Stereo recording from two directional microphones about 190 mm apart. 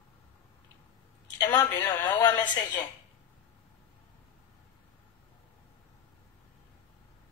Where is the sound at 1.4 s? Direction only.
10° left (ahead or behind).